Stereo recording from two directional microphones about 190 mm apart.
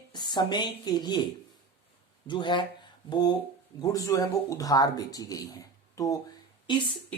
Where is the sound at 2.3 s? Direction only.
25° left (ahead or behind).